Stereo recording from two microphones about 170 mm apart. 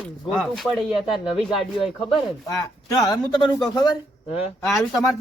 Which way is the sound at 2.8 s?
20° left (ahead or behind).